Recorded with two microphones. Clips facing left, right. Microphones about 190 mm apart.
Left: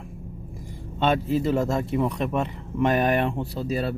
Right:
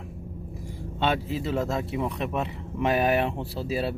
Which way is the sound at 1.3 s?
45° left (ahead or behind).